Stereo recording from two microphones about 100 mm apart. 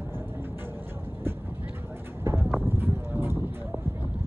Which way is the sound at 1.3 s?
20° right (ahead or behind).